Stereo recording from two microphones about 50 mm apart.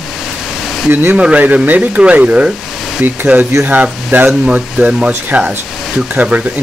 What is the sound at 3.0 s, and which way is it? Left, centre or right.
Speech, right.